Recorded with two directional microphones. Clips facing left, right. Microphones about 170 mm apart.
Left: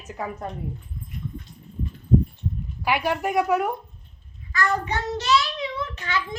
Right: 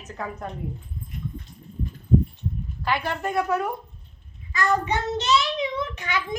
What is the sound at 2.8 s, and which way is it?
Speech, 10° left (ahead or behind).